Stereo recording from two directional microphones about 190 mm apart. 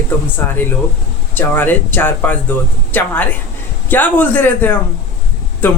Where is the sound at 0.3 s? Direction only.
10° left (ahead or behind).